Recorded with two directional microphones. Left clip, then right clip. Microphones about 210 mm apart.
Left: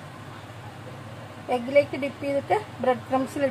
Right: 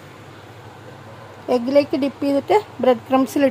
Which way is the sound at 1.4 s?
45° right (ahead or behind).